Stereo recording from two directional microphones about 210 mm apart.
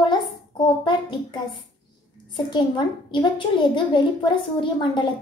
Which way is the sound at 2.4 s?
20° left (ahead or behind).